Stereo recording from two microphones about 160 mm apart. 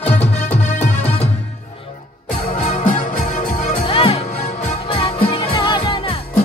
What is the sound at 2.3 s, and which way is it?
Music, 60° left (ahead or behind).